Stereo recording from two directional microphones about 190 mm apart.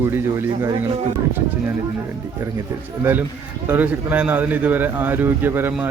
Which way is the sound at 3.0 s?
10° right (ahead or behind).